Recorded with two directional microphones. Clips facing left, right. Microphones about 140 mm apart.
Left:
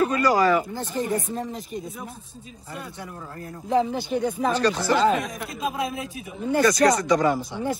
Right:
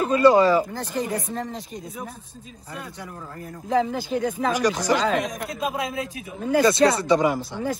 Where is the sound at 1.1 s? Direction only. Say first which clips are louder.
Left 1 dB; 90° right.